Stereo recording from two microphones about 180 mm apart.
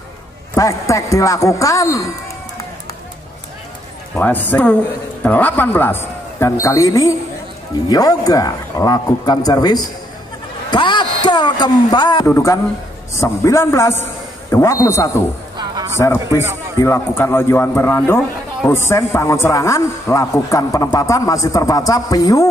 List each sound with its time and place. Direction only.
0.6 s a man's voice: 20° left (ahead or behind)
4.1 s a man's voice: 10° left (ahead or behind)
15.5 s a sound: 20° right (ahead or behind)
16.8 s a man's voice: 15° left (ahead or behind)